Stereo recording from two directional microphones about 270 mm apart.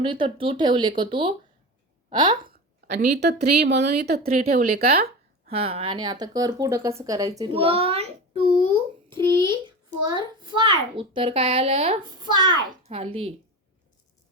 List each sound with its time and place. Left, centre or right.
0.0 s speech: centre
2.4 s a woman's voice: right
5.5 s a child's voice: right
12.3 s a child's voice: right
12.9 s a child's voice: right